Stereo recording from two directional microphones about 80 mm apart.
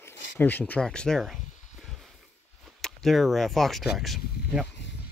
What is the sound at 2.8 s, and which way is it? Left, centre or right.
Speech, centre.